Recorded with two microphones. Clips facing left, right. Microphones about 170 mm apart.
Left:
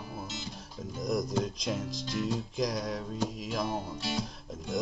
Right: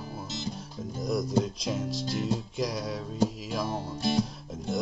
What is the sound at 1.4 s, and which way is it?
Speech, centre (ahead or behind).